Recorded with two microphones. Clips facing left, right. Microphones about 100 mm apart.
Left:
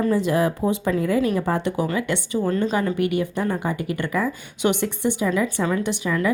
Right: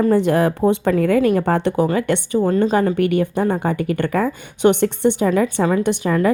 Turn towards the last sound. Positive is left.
turn(degrees=-50)  # may be behind; listen again after turning